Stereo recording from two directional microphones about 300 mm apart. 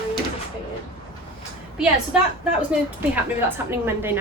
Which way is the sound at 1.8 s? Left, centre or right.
Centre.